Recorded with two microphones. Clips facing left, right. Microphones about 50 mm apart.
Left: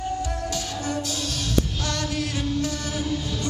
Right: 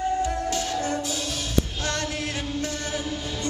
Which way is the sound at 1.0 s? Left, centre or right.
Centre.